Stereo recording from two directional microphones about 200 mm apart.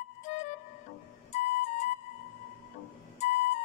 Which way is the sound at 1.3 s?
40° left (ahead or behind).